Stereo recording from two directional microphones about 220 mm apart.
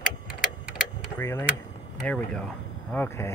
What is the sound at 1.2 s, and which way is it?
Speech, 10° left (ahead or behind).